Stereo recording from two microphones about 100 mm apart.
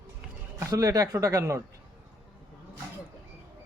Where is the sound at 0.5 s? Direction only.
35° right (ahead or behind).